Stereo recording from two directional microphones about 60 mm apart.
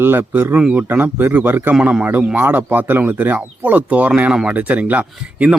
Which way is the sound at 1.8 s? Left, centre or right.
Centre.